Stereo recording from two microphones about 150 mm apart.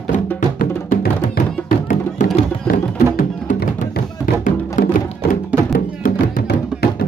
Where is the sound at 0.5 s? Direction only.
90° left.